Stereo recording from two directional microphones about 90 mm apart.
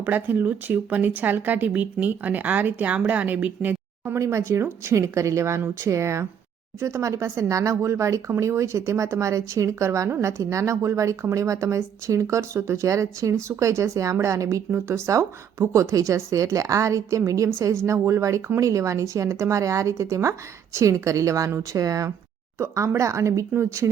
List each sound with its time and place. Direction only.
0.0 s speech: 20° right (ahead or behind)